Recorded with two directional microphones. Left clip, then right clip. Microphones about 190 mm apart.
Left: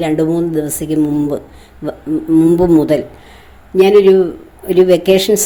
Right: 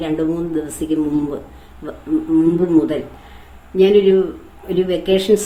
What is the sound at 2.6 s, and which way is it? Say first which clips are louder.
A woman's voice: left 5 dB; 35° left (ahead or behind).